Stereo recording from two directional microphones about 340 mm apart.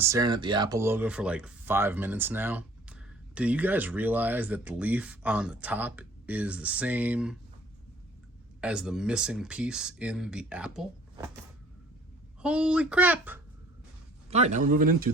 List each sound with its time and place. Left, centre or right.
0.0 s speech: centre
8.6 s speech: centre
12.4 s speech: centre
14.3 s speech: centre